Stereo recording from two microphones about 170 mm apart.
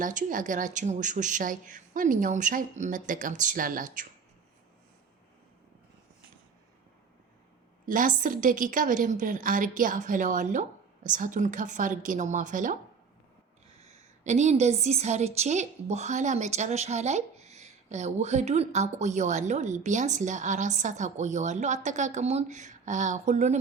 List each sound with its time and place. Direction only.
0.0 s a woman's voice: 50° right (ahead or behind)
7.9 s a woman's voice: 50° right (ahead or behind)
13.8 s a woman's voice: 40° right (ahead or behind)